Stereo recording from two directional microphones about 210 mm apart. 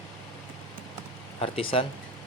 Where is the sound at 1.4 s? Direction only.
25° left (ahead or behind).